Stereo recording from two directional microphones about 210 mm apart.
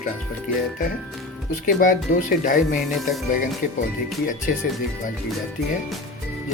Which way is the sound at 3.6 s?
40° left (ahead or behind).